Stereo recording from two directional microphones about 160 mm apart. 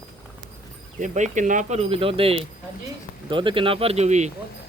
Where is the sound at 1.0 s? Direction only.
50° right (ahead or behind).